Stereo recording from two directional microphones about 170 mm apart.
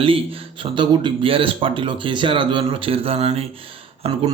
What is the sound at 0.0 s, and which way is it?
A man's voice, 30° right (ahead or behind).